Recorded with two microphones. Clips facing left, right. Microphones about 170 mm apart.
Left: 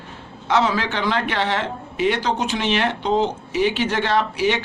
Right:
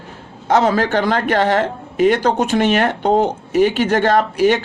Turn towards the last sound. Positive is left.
turn(degrees=-45)  # may be behind; listen again after turning